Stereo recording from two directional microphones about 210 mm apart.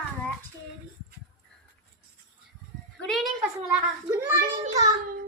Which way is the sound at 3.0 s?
Centre (ahead or behind).